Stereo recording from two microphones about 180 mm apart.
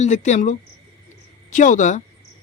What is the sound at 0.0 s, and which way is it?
Speech, 40° left (ahead or behind).